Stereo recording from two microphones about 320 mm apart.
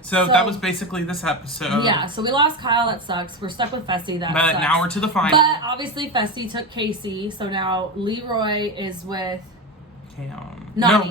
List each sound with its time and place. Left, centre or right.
0.3 s a man's voice: centre
1.8 s a woman's voice: centre
4.4 s a man's voice: centre
5.3 s a woman's voice: centre